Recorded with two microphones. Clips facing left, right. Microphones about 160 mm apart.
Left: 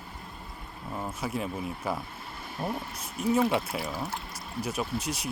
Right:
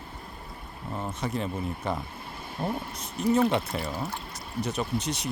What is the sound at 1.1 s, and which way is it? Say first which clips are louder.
Speech: right 2 dB; 5° left (ahead or behind).